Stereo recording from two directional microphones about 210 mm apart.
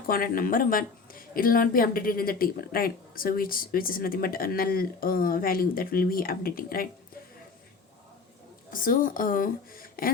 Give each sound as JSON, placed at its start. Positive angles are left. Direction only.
{"t": 0.1, "sound": "speech", "side_deg": 45}
{"t": 8.7, "sound": "a woman's voice", "side_deg": 40}